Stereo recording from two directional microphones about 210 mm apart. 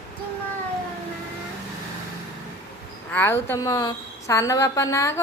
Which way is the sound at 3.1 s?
10° left (ahead or behind).